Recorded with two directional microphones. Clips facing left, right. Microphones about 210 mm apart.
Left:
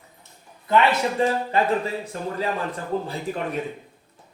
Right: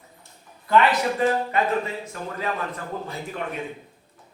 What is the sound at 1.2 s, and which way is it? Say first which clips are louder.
Speech: right 1 dB; 30° left (ahead or behind).